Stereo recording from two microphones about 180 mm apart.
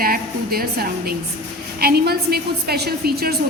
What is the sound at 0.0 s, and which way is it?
A woman's voice, 55° right (ahead or behind).